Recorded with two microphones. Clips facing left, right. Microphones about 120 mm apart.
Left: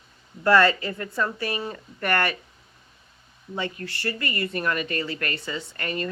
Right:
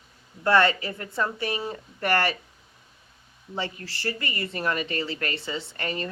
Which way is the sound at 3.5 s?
30° right (ahead or behind).